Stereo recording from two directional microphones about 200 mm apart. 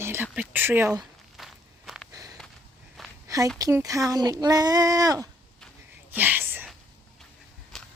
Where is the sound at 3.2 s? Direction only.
15° right (ahead or behind).